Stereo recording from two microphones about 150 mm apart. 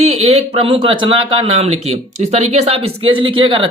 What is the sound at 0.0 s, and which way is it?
Speech, 45° right (ahead or behind).